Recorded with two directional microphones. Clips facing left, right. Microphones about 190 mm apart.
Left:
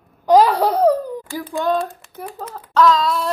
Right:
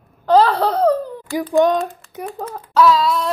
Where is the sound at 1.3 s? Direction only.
20° right (ahead or behind).